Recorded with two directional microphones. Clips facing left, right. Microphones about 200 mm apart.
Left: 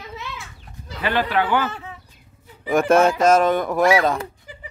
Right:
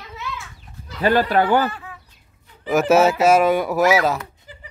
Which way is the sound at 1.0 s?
40° right (ahead or behind).